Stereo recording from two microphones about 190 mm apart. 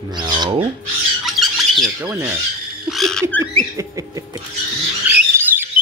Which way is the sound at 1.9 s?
15° right (ahead or behind).